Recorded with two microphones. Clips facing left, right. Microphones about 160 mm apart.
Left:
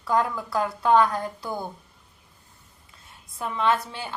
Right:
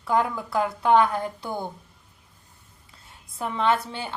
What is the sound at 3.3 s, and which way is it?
Speech, 30° right (ahead or behind).